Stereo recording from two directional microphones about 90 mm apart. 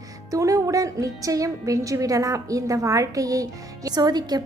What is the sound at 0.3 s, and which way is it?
A woman's voice, 40° right (ahead or behind).